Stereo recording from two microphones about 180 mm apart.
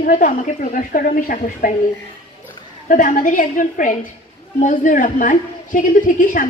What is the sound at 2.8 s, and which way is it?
A woman's voice, 45° left (ahead or behind).